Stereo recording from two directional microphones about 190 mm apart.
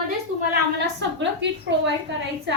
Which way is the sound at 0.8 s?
70° right (ahead or behind).